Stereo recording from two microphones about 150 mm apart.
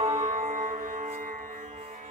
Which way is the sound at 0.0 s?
45° right (ahead or behind).